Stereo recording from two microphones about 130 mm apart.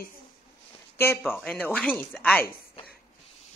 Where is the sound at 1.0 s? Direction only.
15° left (ahead or behind).